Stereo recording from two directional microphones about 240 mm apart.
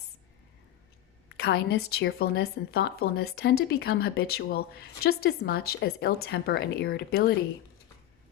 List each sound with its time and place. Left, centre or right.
1.4 s a woman's voice: left